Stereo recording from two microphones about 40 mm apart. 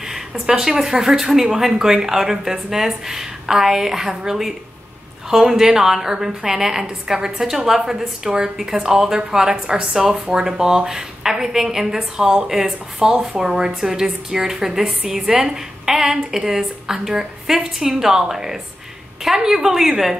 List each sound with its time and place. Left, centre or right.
0.0 s a woman's voice: centre